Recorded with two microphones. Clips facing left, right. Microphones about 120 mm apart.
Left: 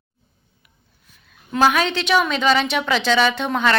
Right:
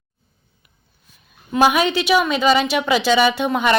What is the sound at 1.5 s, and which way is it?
A woman's voice, 10° right (ahead or behind).